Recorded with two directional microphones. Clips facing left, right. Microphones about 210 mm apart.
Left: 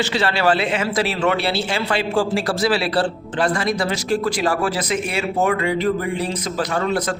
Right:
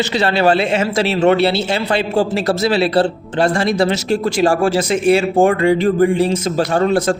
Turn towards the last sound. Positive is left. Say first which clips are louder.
# right 6 dB
turn(degrees=-30)  # may be behind; listen again after turning